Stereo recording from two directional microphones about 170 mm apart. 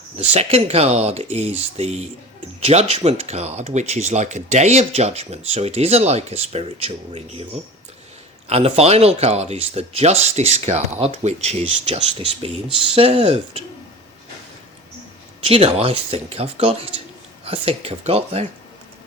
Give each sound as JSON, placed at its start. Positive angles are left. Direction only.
{"t": 0.3, "sound": "speech", "side_deg": -35}
{"t": 8.4, "sound": "speech", "side_deg": -35}
{"t": 15.4, "sound": "speech", "side_deg": -35}